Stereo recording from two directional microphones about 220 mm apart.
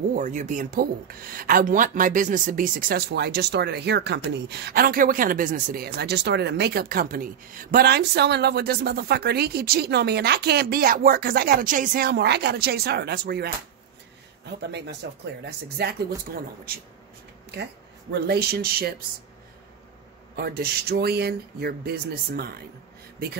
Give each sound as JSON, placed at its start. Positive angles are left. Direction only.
{"t": 0.1, "sound": "speech", "side_deg": -35}
{"t": 18.2, "sound": "speech", "side_deg": -45}
{"t": 20.3, "sound": "speech", "side_deg": -45}